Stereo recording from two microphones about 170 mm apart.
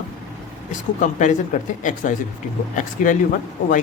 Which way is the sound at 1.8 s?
45° left (ahead or behind).